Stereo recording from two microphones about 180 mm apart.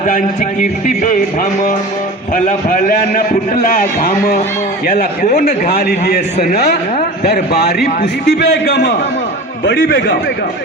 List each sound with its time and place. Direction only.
0.9 s a man's voice: 50° left (ahead or behind); by 8.9 s 70° left (ahead or behind)
9.6 s a man's voice: 60° left (ahead or behind)